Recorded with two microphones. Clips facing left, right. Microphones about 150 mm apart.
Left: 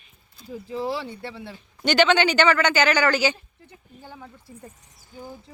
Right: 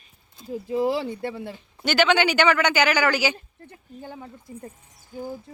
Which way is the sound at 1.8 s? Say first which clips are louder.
Left 1 dB; 5° right (ahead or behind).